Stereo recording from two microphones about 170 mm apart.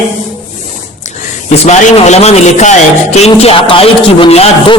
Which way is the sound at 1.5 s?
40° left (ahead or behind).